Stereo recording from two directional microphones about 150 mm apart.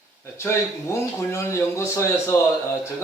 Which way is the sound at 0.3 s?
20° left (ahead or behind).